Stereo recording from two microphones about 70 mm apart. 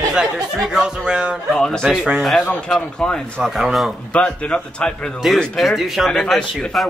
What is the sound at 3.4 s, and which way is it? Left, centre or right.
Speech, centre.